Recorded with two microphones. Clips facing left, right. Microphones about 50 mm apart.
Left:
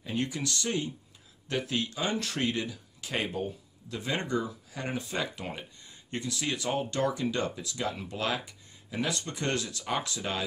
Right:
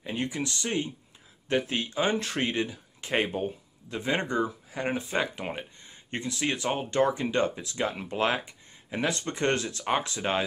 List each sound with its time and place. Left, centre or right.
0.0 s speech: right